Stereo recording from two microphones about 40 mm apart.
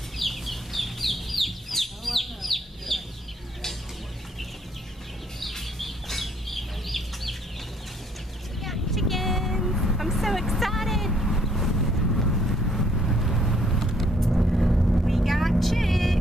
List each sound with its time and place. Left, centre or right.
0.2 s chicken: centre
5.4 s chicken: centre
8.5 s vehicle: centre